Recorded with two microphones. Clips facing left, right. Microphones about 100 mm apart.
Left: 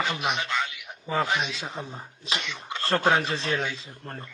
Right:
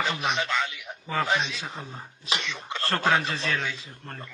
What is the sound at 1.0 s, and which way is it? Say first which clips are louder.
Speech: even; 20° left (ahead or behind).